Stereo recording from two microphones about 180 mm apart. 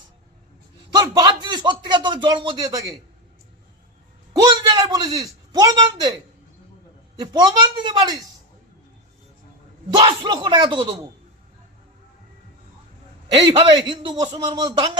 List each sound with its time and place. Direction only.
0.9 s speech: 25° right (ahead or behind)
4.4 s speech: 20° right (ahead or behind)
7.2 s speech: 25° right (ahead or behind)
10.0 s speech: 25° right (ahead or behind)
13.5 s speech: 25° right (ahead or behind)